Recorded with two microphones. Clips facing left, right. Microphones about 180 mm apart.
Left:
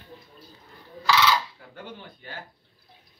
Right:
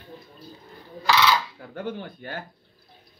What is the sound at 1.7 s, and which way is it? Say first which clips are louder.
Speech: right 11 dB; 50° right (ahead or behind).